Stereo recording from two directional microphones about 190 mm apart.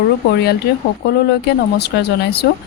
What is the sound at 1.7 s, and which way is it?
Speech, 60° left (ahead or behind).